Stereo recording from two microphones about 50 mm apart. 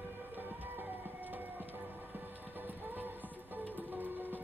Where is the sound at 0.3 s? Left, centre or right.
Right.